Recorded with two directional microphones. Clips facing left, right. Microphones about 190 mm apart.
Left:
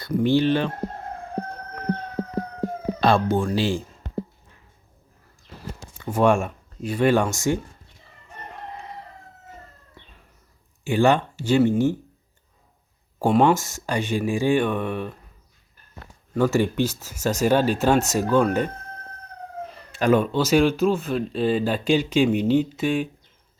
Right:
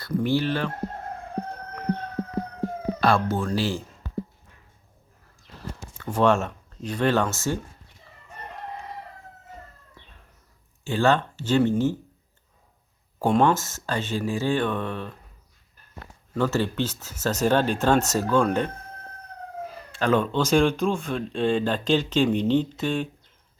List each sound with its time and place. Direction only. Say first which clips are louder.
0.0 s speech: left 4 dB; 20° left (ahead or behind)
3.0 s speech: left 3 dB; 20° left (ahead or behind)
6.0 s speech: left 2 dB; 10° left (ahead or behind)
10.8 s speech: left 3 dB; 15° left (ahead or behind)
13.1 s speech: left 2 dB; 10° left (ahead or behind)
16.3 s speech: left 4 dB; 10° left (ahead or behind)
19.9 s speech: left 3 dB; 10° left (ahead or behind)